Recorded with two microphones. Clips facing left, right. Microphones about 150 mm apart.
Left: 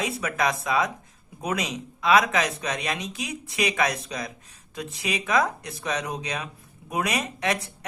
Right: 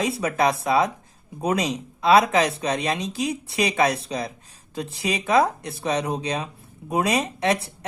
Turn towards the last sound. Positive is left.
turn(degrees=-30)  # may be behind; listen again after turning